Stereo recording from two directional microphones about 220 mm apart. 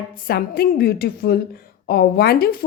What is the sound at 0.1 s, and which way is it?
A woman's voice, 40° left (ahead or behind).